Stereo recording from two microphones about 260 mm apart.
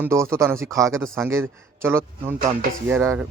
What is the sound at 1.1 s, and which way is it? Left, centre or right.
A man's voice, centre.